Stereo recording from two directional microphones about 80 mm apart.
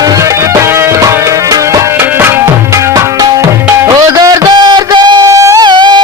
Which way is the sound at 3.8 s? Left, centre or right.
Right.